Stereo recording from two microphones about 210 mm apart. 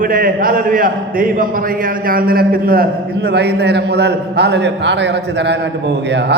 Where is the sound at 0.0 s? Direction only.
40° right (ahead or behind).